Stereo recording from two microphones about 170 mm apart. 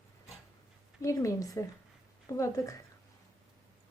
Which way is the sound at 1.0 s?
20° left (ahead or behind).